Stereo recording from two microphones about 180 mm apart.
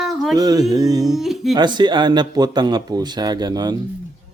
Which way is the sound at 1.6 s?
25° right (ahead or behind).